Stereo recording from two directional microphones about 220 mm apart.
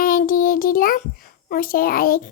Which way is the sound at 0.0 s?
40° left (ahead or behind).